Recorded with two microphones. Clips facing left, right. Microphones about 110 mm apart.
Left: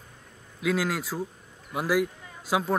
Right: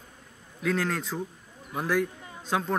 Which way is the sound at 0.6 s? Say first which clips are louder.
Left 1 dB; 5° left (ahead or behind).